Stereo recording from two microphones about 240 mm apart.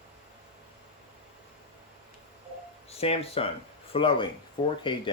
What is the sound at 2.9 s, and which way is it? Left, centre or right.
Speech, left.